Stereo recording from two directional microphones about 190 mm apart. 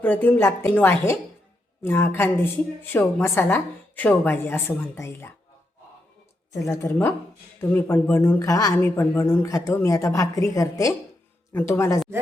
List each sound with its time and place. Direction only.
0.0 s a woman's voice: 10° left (ahead or behind)
6.5 s a woman's voice: 15° left (ahead or behind)